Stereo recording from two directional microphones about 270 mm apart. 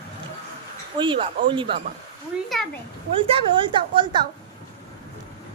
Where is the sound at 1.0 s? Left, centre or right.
Centre.